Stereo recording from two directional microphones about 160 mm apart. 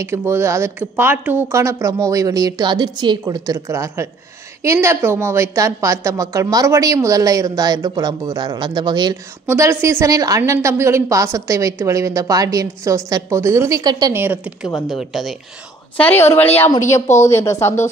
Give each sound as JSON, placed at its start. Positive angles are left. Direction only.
{"t": 0.0, "sound": "a woman's voice", "side_deg": -15}
{"t": 14.1, "sound": "a woman's voice", "side_deg": -10}
{"t": 16.0, "sound": "a woman's voice", "side_deg": 15}